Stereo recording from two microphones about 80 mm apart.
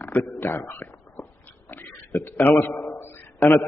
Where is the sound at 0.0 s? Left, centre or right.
Left.